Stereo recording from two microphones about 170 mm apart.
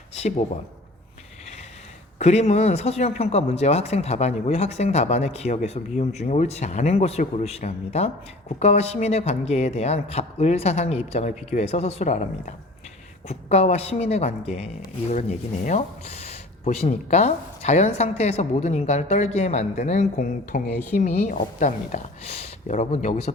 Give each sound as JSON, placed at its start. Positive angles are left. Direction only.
{"t": 0.1, "sound": "speech", "side_deg": 40}
{"t": 2.1, "sound": "a woman's voice", "side_deg": 40}